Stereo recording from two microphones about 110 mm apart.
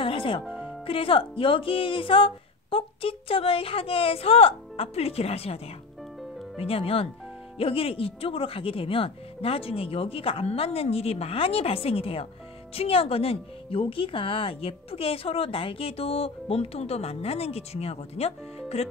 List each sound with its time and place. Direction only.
0.0 s music: 50° left (ahead or behind)
0.5 s music: 10° right (ahead or behind)
0.8 s speech: 55° left (ahead or behind)
6.6 s speech: 60° left (ahead or behind)